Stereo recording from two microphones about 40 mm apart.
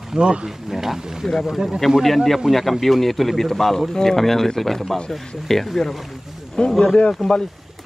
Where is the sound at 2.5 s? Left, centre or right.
Centre.